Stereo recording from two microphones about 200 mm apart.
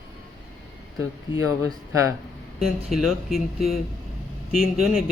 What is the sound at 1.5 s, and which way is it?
Speech, 90° left.